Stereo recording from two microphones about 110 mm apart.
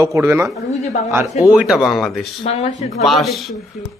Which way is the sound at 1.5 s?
5° right (ahead or behind).